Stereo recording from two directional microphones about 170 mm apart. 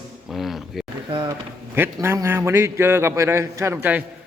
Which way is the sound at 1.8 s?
15° right (ahead or behind).